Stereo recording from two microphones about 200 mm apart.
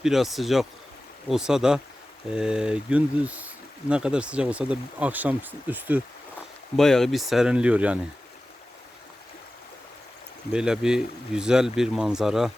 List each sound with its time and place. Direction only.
0.0 s speech: centre (ahead or behind)
6.7 s speech: centre (ahead or behind)
10.5 s speech: 5° right (ahead or behind)